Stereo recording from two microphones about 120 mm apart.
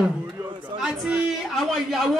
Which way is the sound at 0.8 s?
5° right (ahead or behind).